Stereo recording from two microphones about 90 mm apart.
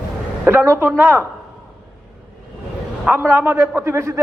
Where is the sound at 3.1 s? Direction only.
20° right (ahead or behind).